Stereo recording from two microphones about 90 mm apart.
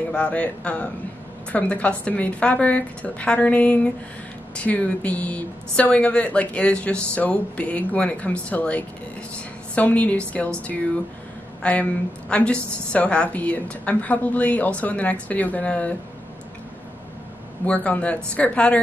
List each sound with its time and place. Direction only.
0.1 s a woman's voice: 15° left (ahead or behind)
17.6 s a woman's voice: 15° left (ahead or behind)